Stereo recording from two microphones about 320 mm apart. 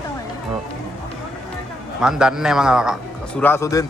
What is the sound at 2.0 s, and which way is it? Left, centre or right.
A man's voice, centre.